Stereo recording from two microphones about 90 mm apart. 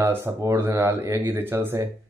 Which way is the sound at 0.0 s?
25° right (ahead or behind).